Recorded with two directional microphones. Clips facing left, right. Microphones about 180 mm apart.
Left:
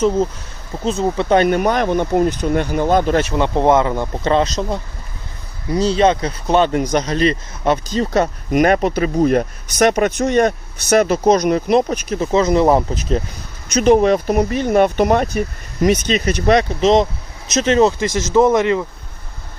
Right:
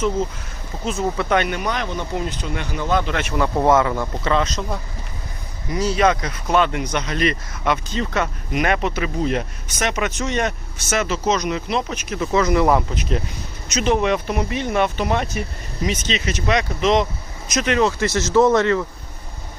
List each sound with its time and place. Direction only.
0.9 s speech: 25° left (ahead or behind)
3.3 s speech: 25° left (ahead or behind); by 10.4 s 50° left (ahead or behind)
10.4 s speech: 35° left (ahead or behind)
11.1 s speech: 55° left (ahead or behind)
11.4 s speech: 45° left (ahead or behind)
16.5 s speech: 35° left (ahead or behind)
18.0 s speech: 15° left (ahead or behind)